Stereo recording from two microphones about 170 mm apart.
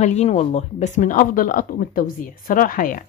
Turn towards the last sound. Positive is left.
turn(degrees=50)  # may be behind; listen again after turning